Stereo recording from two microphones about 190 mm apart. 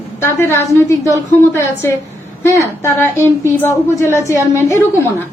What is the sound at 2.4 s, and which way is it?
A woman's voice, 15° left (ahead or behind).